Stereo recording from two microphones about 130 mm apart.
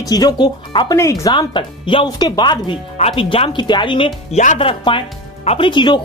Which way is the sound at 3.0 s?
45° left (ahead or behind).